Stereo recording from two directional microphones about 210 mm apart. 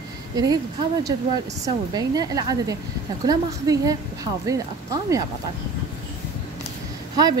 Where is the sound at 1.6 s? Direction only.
20° right (ahead or behind).